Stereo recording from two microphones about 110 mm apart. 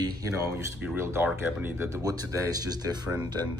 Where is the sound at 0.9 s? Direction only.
20° right (ahead or behind).